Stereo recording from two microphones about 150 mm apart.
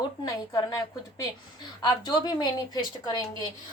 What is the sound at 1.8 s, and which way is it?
Speech, 25° left (ahead or behind).